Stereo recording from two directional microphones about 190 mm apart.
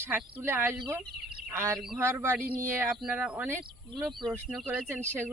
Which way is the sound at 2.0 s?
15° right (ahead or behind).